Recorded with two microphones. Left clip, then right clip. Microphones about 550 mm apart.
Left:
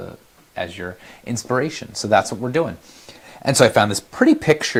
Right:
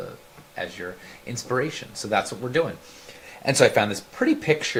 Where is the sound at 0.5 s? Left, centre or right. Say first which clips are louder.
Left 4 dB; left.